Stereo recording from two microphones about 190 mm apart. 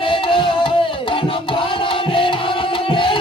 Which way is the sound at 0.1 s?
25° left (ahead or behind).